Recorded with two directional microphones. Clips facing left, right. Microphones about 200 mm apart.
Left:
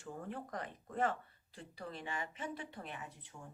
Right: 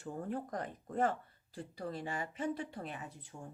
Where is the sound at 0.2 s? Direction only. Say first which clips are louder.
Right 5 dB; 40° right (ahead or behind).